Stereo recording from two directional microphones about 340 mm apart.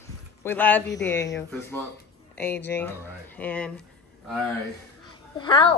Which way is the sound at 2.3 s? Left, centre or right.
Centre.